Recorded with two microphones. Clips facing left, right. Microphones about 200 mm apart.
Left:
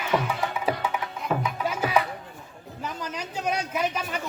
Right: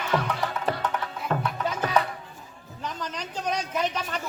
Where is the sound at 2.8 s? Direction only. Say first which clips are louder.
Left 1 dB; 10° left (ahead or behind).